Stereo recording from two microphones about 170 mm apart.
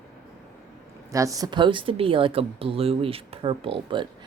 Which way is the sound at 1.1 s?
20° right (ahead or behind).